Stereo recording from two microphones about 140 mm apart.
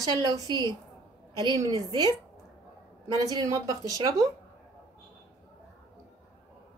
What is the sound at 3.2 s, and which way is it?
A woman's voice, 25° right (ahead or behind).